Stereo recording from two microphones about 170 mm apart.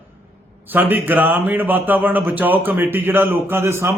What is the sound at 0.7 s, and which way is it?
A man's voice, 10° right (ahead or behind).